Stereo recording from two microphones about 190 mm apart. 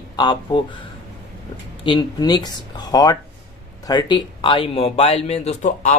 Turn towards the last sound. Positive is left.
turn(degrees=40)  # may be behind; listen again after turning